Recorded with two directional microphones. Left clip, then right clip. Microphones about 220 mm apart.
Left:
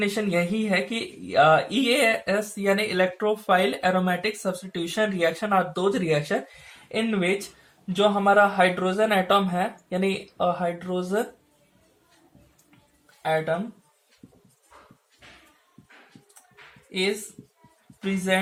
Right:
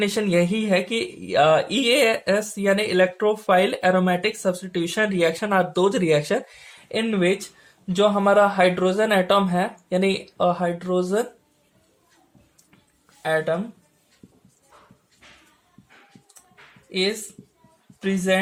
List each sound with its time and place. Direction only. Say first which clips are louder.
0.0 s speech: right 4 dB; 45° right (ahead or behind)
13.2 s speech: right 2 dB; 40° right (ahead or behind)
16.9 s speech: right 2 dB; 45° right (ahead or behind)